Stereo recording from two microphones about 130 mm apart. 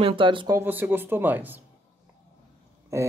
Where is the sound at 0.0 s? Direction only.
40° right (ahead or behind).